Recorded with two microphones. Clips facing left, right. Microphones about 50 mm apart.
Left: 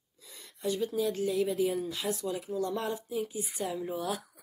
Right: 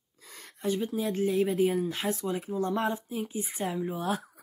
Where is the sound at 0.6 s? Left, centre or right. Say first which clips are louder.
Right 1 dB; right.